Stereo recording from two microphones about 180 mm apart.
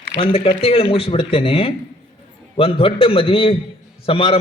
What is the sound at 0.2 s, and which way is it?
A man's voice, 30° left (ahead or behind).